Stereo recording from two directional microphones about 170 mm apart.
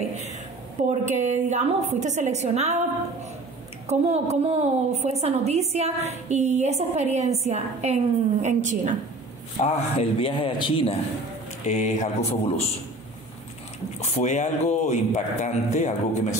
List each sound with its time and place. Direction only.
0.7 s a woman's voice: 45° right (ahead or behind)
3.9 s a woman's voice: 40° right (ahead or behind)
9.6 s speech: 35° left (ahead or behind)
11.6 s speech: 45° left (ahead or behind)
14.0 s speech: 45° left (ahead or behind)